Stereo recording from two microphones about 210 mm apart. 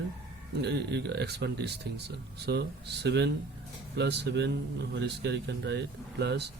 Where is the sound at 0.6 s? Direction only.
50° right (ahead or behind).